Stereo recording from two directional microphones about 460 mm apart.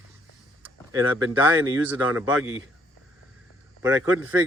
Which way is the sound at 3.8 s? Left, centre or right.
Centre.